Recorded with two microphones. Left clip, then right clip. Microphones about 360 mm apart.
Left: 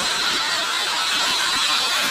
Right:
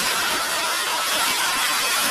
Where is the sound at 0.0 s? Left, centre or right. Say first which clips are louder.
Left 1 dB; centre.